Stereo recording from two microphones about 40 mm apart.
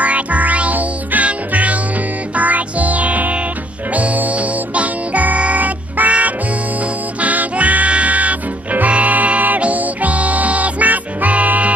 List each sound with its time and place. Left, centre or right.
0.0 s music: right